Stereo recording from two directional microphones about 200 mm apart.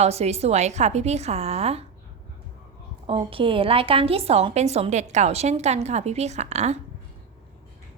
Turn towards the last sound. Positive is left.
turn(degrees=-35)  # may be behind; listen again after turning